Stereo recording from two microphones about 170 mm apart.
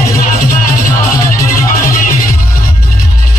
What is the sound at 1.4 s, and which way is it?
Music, 20° left (ahead or behind).